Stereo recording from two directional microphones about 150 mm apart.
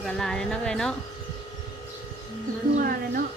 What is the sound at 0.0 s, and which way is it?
Music, 5° left (ahead or behind).